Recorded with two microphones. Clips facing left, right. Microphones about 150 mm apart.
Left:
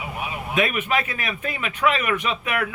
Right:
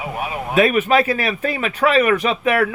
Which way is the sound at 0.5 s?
35° right (ahead or behind).